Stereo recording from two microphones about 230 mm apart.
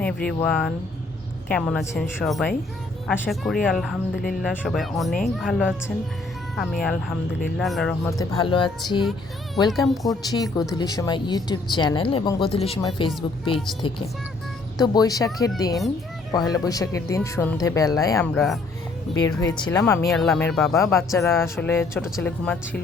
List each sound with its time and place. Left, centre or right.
0.0 s speech: centre
8.2 s speech: centre
9.6 s speech: centre
10.3 s speech: centre
14.8 s speech: centre
19.1 s speech: centre
20.1 s speech: centre
20.7 s speech: centre
21.9 s speech: centre